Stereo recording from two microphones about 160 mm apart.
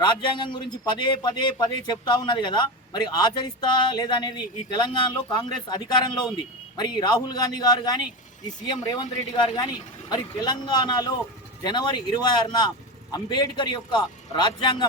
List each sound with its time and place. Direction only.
0.0 s a man's voice: 30° left (ahead or behind)